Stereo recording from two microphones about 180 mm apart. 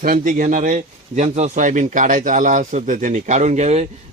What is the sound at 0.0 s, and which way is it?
Speech, 50° right (ahead or behind).